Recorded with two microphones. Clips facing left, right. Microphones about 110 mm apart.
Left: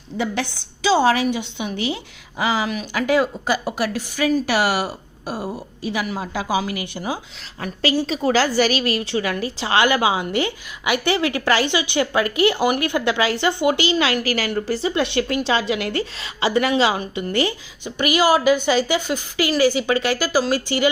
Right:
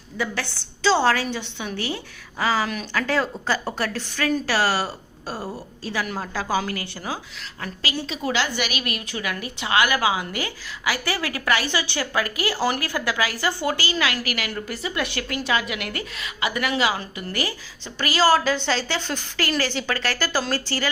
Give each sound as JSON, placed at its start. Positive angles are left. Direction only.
{"t": 0.2, "sound": "a woman's voice", "side_deg": 20}
{"t": 7.8, "sound": "a woman's voice", "side_deg": 35}